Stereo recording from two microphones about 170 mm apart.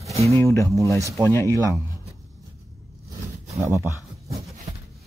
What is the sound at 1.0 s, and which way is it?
Speech, 15° right (ahead or behind).